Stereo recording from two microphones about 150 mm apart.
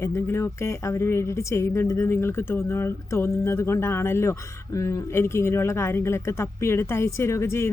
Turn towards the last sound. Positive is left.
turn(degrees=15)  # may be behind; listen again after turning